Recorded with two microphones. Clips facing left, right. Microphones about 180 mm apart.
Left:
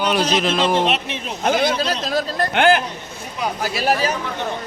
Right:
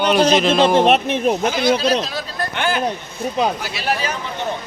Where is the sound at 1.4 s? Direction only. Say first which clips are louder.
Left 4 dB; 50° left (ahead or behind).